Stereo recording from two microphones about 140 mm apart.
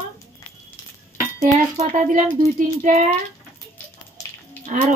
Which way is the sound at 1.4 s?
55° right (ahead or behind).